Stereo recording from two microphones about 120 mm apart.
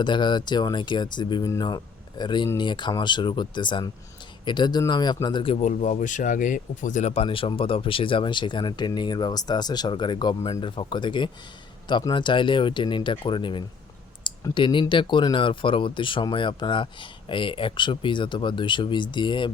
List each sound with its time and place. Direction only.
0.0 s speech: 40° left (ahead or behind)
5.5 s speech: 85° left; by 19.5 s 40° left (ahead or behind)